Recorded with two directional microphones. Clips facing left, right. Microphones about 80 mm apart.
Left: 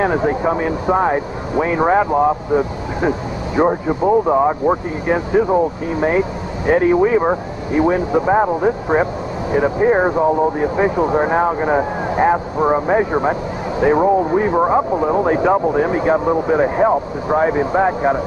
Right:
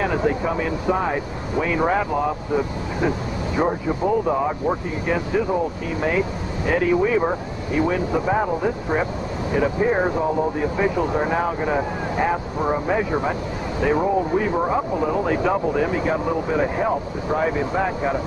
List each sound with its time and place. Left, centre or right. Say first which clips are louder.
0.0 s speech: left 5 dB; left